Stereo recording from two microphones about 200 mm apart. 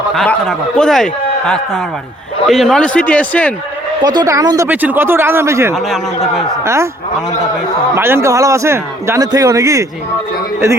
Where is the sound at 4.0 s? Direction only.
20° right (ahead or behind).